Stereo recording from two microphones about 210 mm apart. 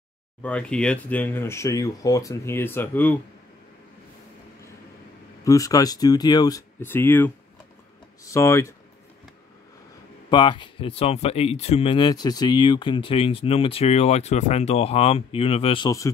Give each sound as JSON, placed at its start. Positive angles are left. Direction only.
{"t": 0.4, "sound": "speech", "side_deg": 5}
{"t": 5.4, "sound": "speech", "side_deg": 15}
{"t": 10.3, "sound": "speech", "side_deg": 20}